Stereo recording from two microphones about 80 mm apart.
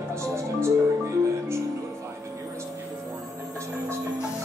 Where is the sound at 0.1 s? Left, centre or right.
Right.